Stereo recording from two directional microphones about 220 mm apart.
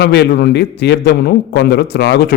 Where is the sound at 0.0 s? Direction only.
50° left (ahead or behind).